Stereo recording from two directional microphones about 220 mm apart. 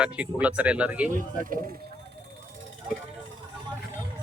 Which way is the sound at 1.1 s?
40° right (ahead or behind).